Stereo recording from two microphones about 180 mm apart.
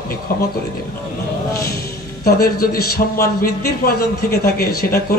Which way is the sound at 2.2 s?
60° left (ahead or behind).